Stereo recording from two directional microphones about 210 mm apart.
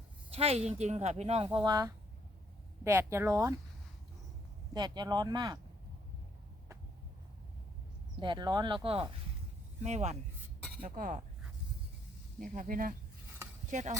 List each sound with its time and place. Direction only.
0.3 s speech: 30° right (ahead or behind)
1.6 s speech: 20° right (ahead or behind)
4.7 s speech: 20° right (ahead or behind)
8.2 s speech: 20° right (ahead or behind)
10.8 s speech: 45° right (ahead or behind)
12.4 s speech: 40° right (ahead or behind)